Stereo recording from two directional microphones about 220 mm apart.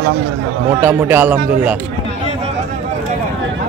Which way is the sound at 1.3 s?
40° right (ahead or behind).